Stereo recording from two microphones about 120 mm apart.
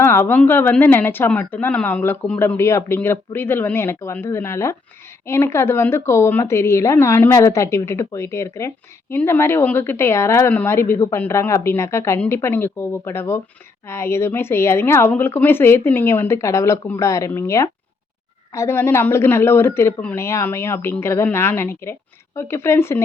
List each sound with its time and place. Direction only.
0.0 s a woman's voice: 20° left (ahead or behind)